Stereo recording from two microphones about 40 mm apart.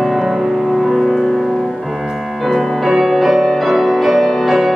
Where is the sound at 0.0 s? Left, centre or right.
Centre.